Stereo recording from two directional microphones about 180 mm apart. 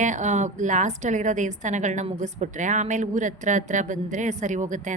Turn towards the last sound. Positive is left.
turn(degrees=-45)  # may be behind; listen again after turning